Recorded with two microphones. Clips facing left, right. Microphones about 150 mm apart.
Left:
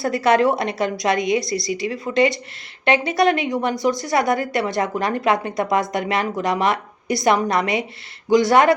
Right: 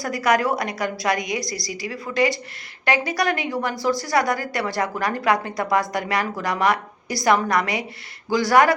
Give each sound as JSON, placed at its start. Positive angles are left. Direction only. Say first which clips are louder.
{"t": 0.0, "sound": "a woman's voice", "louder": "left 4 dB", "side_deg": 25}